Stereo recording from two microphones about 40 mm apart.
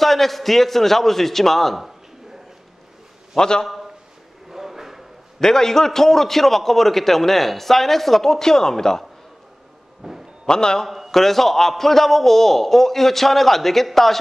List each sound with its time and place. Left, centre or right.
0.0 s a man's voice: centre
3.3 s a man's voice: centre
3.6 s a sound: centre
5.4 s a man's voice: centre
10.0 s a sound: centre
10.4 s a man's voice: centre
11.1 s a man's voice: centre